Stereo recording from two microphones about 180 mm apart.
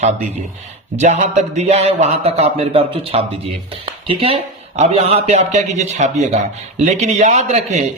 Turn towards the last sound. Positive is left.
turn(degrees=-40)  # may be behind; listen again after turning